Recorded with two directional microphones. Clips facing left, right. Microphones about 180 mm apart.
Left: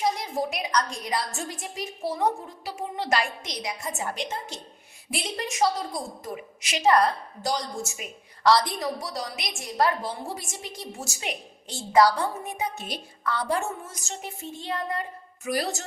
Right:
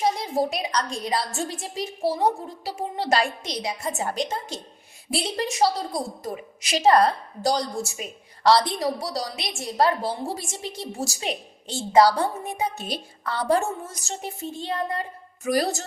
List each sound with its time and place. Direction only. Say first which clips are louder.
0.0 s a woman's voice: right 3 dB; 30° right (ahead or behind)